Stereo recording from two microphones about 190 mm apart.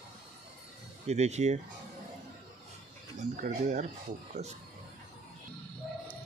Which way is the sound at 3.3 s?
40° right (ahead or behind).